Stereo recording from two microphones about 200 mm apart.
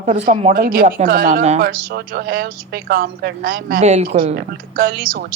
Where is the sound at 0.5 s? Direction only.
45° right (ahead or behind).